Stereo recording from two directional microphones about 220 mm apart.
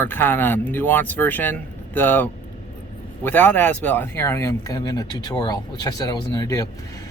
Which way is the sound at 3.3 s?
10° left (ahead or behind).